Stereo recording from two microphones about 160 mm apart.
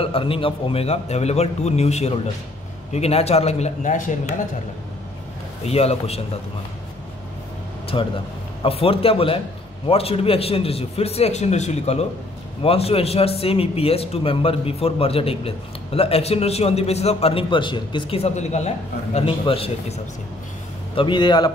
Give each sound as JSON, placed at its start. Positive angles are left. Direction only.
{"t": 0.0, "sound": "a man's voice", "side_deg": 35}
{"t": 5.7, "sound": "a man's voice", "side_deg": 40}
{"t": 7.9, "sound": "a man's voice", "side_deg": 30}